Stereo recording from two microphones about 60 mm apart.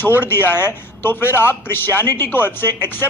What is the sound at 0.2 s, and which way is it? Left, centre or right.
Speech, left.